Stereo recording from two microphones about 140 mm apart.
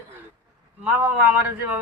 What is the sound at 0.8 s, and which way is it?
Speech, 15° right (ahead or behind).